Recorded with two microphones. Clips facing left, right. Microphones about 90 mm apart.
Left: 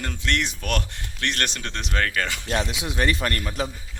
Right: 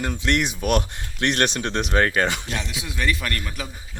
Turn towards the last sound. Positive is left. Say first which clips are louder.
# left 3 dB
turn(degrees=35)  # may be behind; listen again after turning